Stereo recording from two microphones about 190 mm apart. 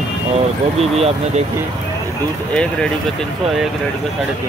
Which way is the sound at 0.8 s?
30° right (ahead or behind).